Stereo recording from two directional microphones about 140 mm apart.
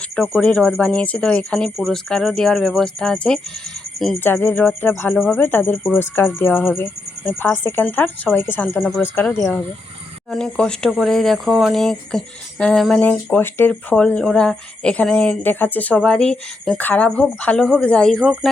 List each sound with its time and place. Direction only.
0.2 s speech: 5° left (ahead or behind)
4.2 s speech: 15° left (ahead or behind)
5.7 s speech: 5° left (ahead or behind)
6.0 s speech: 15° left (ahead or behind)